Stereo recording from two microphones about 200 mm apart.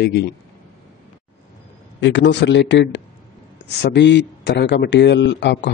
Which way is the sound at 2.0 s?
60° left (ahead or behind).